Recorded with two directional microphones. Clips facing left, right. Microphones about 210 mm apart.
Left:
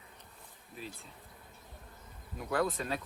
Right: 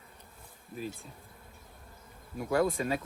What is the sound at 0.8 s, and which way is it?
Speech, 45° right (ahead or behind).